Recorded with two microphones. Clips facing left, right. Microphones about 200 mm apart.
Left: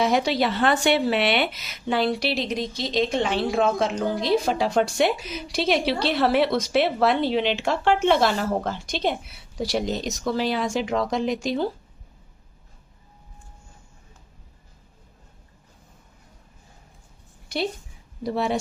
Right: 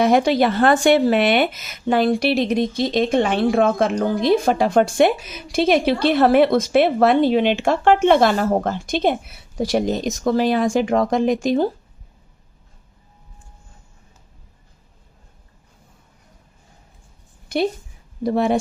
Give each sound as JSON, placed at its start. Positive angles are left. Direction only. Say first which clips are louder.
{"t": 0.0, "sound": "speech", "louder": "right 6 dB", "side_deg": -50}
{"t": 17.5, "sound": "a woman's voice", "louder": "right 6 dB", "side_deg": -50}